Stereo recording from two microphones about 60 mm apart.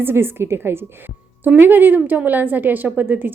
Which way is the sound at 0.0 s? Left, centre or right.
Right.